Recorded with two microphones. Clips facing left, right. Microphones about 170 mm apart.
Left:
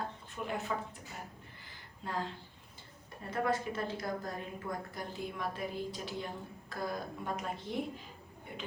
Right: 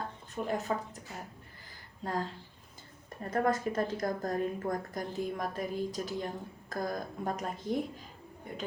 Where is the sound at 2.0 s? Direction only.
40° right (ahead or behind).